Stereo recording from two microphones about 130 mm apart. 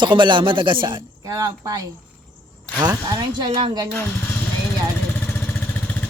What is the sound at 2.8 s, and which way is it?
Speech, 35° right (ahead or behind).